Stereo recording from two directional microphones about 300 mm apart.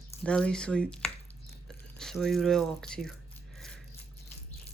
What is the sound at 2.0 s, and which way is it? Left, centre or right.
Speech, centre.